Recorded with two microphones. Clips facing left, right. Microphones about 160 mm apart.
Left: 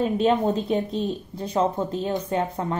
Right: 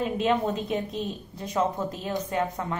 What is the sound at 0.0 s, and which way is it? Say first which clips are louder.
Speech: left 4 dB; 30° left (ahead or behind).